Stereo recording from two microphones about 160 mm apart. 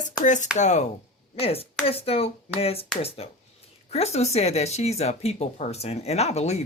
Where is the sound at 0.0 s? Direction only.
50° left (ahead or behind).